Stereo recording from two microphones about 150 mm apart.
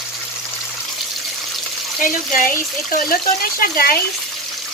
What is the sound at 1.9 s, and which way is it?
Speech, 65° left (ahead or behind).